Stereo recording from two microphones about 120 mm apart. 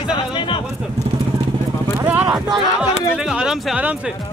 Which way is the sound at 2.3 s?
5° right (ahead or behind).